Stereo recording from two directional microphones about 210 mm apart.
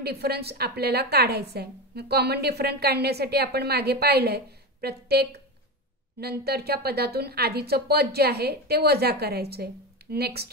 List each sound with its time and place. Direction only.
0.0 s a woman's voice: 50° right (ahead or behind)